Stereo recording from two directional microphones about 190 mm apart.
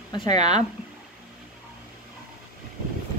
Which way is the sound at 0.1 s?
25° left (ahead or behind).